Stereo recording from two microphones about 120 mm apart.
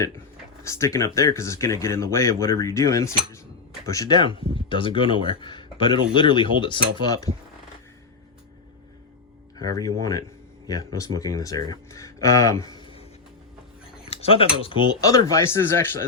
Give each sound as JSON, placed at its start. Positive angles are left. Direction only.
{"t": 0.7, "sound": "speech", "side_deg": 25}
{"t": 9.6, "sound": "speech", "side_deg": 30}
{"t": 14.1, "sound": "speech", "side_deg": 55}
{"t": 15.0, "sound": "speech", "side_deg": 30}